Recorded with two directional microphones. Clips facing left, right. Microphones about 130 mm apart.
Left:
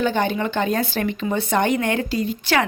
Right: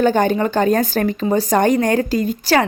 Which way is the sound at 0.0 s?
45° right (ahead or behind).